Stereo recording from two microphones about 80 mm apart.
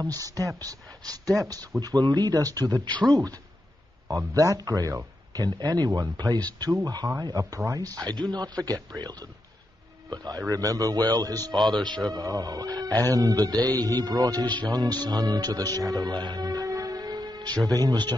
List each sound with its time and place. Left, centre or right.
0.0 s speech: right
4.3 s speech: right
8.1 s speech: right
12.1 s speech: right